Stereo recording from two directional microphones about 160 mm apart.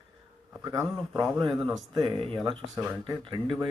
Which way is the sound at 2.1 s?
35° right (ahead or behind).